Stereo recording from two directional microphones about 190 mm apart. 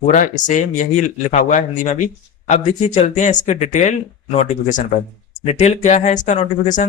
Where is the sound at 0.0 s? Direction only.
40° left (ahead or behind).